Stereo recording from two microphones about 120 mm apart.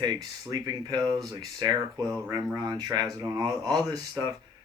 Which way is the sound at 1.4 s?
30° right (ahead or behind).